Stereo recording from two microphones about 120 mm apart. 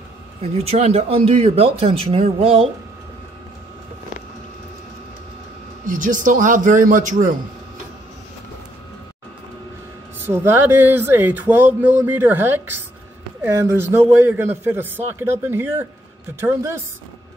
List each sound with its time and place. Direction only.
0.4 s speech: 60° right (ahead or behind)
5.9 s a man's voice: 90° right
10.3 s a man's voice: 20° right (ahead or behind)